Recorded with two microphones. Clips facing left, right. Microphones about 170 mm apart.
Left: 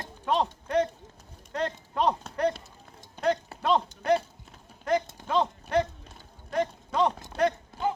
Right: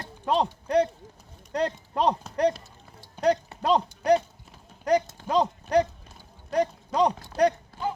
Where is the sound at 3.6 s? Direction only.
35° right (ahead or behind).